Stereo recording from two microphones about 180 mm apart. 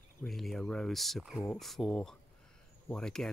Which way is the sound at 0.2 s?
Centre (ahead or behind).